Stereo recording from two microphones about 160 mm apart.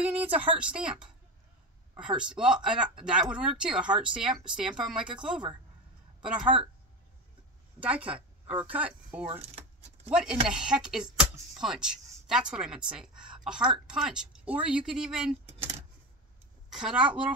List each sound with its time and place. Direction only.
0.0 s speech: 10° right (ahead or behind)
2.0 s speech: 5° right (ahead or behind)
5.0 s speech: 30° right (ahead or behind)
7.8 s speech: 10° right (ahead or behind)
16.7 s speech: 5° right (ahead or behind)